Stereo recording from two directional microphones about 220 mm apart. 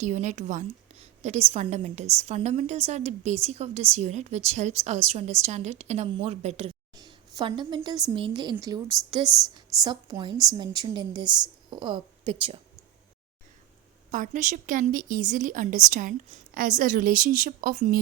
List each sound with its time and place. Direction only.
0.0 s a woman's voice: 35° right (ahead or behind)
6.9 s a sound: 20° right (ahead or behind)
7.9 s a woman's voice: 20° right (ahead or behind)
14.1 s a woman's voice: 35° right (ahead or behind)